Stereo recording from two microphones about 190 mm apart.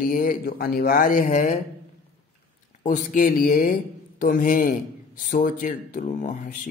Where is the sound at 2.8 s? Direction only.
45° left (ahead or behind).